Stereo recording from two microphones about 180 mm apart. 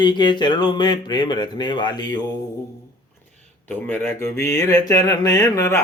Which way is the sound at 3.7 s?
10° left (ahead or behind).